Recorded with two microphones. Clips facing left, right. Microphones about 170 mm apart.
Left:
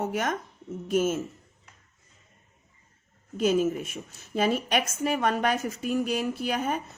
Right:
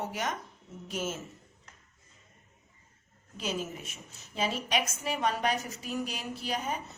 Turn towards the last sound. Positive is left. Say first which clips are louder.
# left 6 dB
turn(degrees=55)  # may be behind; listen again after turning